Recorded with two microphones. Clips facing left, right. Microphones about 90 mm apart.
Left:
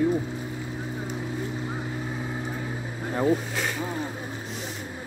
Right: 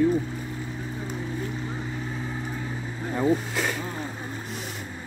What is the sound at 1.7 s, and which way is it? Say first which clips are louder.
Vehicle: left 1 dB; 10° left (ahead or behind).